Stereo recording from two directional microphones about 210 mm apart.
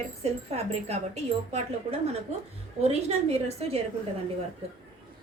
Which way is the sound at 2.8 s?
30° right (ahead or behind).